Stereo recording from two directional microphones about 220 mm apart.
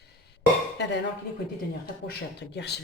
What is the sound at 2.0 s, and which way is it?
Speech, 50° left (ahead or behind).